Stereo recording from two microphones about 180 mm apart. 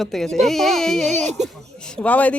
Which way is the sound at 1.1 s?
40° right (ahead or behind).